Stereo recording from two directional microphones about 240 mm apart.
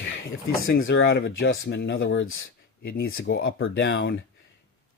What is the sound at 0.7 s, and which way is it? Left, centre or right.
Speech, left.